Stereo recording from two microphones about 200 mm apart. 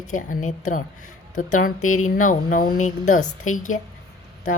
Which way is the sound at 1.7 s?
90° left.